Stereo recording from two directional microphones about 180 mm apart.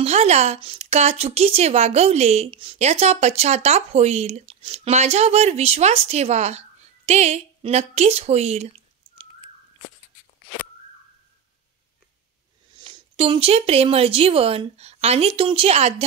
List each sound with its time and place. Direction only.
0.0 s speech: 35° right (ahead or behind)
12.7 s speech: 25° right (ahead or behind)